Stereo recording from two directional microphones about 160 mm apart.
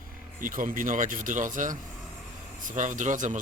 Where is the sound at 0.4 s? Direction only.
55° right (ahead or behind).